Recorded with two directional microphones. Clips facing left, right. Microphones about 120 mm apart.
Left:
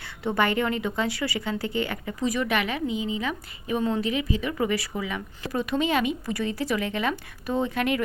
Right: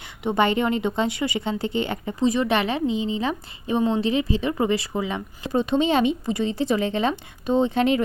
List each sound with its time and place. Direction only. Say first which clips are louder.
0.0 s speech: right 3 dB; 20° right (ahead or behind)